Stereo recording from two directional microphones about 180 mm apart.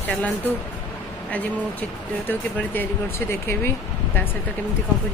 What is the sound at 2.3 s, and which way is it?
Speech, 10° left (ahead or behind).